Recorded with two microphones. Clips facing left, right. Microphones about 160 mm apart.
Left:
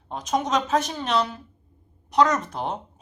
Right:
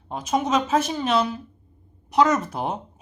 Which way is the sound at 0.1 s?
5° right (ahead or behind).